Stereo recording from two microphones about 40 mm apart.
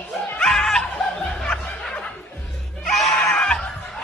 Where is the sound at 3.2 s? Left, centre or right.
Centre.